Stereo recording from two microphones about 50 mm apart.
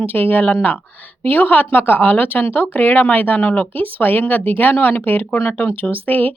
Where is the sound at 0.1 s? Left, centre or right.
Left.